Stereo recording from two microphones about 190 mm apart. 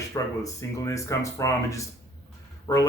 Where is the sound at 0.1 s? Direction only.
15° left (ahead or behind).